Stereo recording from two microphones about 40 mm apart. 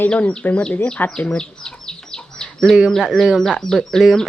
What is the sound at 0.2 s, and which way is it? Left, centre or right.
Speech, left.